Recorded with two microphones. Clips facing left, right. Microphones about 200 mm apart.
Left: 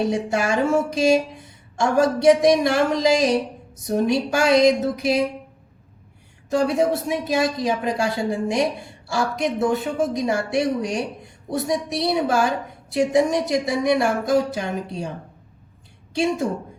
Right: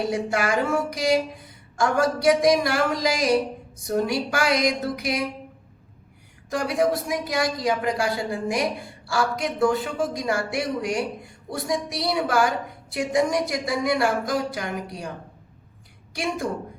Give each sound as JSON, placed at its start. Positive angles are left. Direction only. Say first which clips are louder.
{"t": 0.1, "sound": "a woman's voice", "louder": "left 2 dB", "side_deg": 25}
{"t": 6.5, "sound": "a woman's voice", "louder": "left 3 dB", "side_deg": 25}
{"t": 16.1, "sound": "a woman's voice", "louder": "left 6 dB", "side_deg": 25}